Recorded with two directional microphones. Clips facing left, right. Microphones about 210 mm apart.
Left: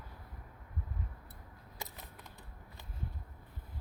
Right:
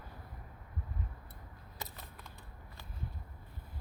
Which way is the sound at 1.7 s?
15° left (ahead or behind).